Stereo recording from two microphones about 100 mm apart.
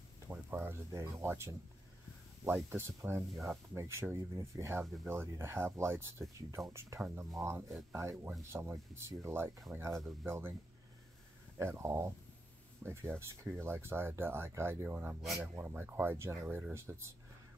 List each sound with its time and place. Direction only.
0.3 s speech: 20° right (ahead or behind)
11.5 s speech: 25° right (ahead or behind)